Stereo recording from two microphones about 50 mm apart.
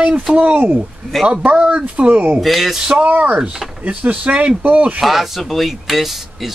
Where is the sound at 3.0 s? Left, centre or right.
Right.